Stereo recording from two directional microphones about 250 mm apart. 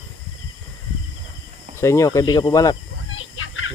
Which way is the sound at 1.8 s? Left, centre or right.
Centre.